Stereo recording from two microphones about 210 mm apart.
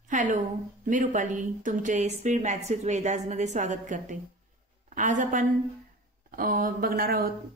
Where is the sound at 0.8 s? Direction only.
35° right (ahead or behind).